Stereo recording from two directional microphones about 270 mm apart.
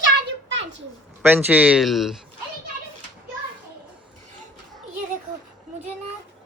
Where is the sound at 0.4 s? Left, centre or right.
Right.